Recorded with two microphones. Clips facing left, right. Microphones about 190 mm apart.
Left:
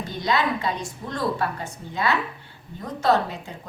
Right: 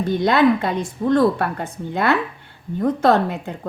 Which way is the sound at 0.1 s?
55° right (ahead or behind).